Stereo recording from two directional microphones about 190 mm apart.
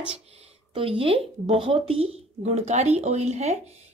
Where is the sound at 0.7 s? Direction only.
30° right (ahead or behind).